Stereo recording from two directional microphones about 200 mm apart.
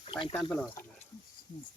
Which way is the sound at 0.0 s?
25° left (ahead or behind).